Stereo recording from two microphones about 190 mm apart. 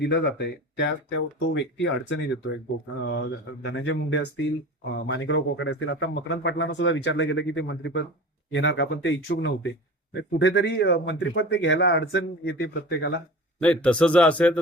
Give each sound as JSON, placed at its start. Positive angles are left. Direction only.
{"t": 0.0, "sound": "speech", "side_deg": 60}
{"t": 5.0, "sound": "speech", "side_deg": 90}
{"t": 13.6, "sound": "speech", "side_deg": 5}